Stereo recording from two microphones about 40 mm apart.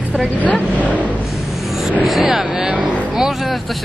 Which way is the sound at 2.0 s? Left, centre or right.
Centre.